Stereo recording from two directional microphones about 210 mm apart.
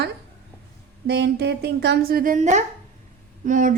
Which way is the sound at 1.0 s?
50° right (ahead or behind).